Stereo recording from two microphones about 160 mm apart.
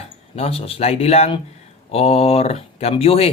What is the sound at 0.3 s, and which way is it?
A man's voice, 40° left (ahead or behind).